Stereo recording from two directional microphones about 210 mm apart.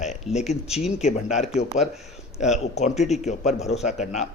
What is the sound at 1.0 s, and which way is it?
A man's voice, 30° left (ahead or behind).